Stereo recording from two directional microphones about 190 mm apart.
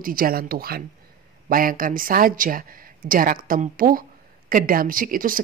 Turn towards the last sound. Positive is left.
turn(degrees=-45)  # may be behind; listen again after turning